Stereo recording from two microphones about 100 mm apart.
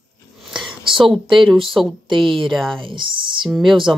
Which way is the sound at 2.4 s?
Centre (ahead or behind).